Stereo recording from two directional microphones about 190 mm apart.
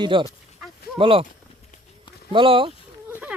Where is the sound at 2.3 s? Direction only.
30° right (ahead or behind).